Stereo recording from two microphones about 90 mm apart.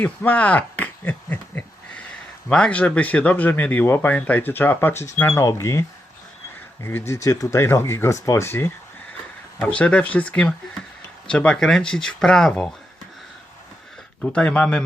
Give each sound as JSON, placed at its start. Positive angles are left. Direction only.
{"t": 0.0, "sound": "a sound", "side_deg": 20}
{"t": 2.5, "sound": "speech", "side_deg": 10}
{"t": 6.8, "sound": "speech", "side_deg": 30}
{"t": 9.6, "sound": "speech", "side_deg": 15}
{"t": 14.2, "sound": "speech", "side_deg": 15}